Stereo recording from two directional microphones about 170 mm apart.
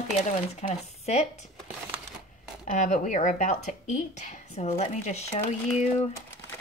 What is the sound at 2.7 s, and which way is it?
Speech, 50° left (ahead or behind).